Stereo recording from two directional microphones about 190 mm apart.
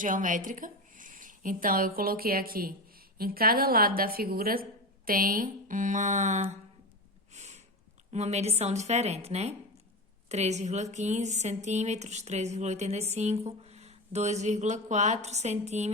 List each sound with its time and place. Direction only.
0.0 s a woman's voice: 45° right (ahead or behind)
7.3 s sniff: 35° right (ahead or behind)
8.1 s speech: 35° right (ahead or behind)